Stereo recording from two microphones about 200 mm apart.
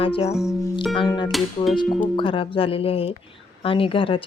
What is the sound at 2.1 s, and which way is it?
Speech, 25° left (ahead or behind).